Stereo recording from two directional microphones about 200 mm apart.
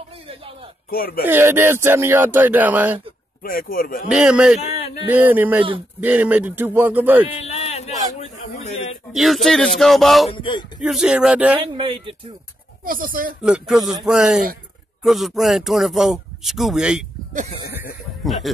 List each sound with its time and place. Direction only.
0.8 s speech: 50° left (ahead or behind)
1.2 s speech: 10° right (ahead or behind)
3.4 s speech: 45° left (ahead or behind)
4.1 s speech: 5° right (ahead or behind)
7.4 s a sound: 35° left (ahead or behind)
9.1 s speech: centre (ahead or behind)
10.3 s speech: 25° left (ahead or behind)
10.8 s speech: 5° right (ahead or behind)
11.7 s speech: 25° right (ahead or behind)
12.8 s speech: 45° right (ahead or behind)
13.4 s speech: 5° right (ahead or behind)